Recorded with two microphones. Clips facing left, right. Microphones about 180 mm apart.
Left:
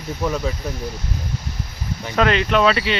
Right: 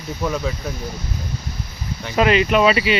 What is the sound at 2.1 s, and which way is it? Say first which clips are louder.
Speech: right 2 dB; 5° right (ahead or behind).